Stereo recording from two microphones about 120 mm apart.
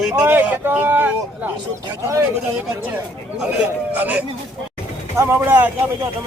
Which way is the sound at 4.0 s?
10° right (ahead or behind).